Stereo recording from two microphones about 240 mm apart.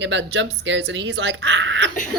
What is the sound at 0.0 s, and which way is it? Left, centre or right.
A woman's voice, right.